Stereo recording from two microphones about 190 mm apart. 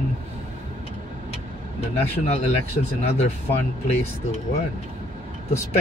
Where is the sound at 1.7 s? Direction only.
35° left (ahead or behind).